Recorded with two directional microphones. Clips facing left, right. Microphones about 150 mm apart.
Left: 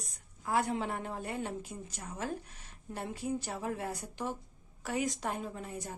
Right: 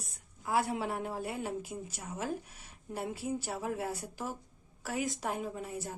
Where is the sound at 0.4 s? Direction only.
5° right (ahead or behind).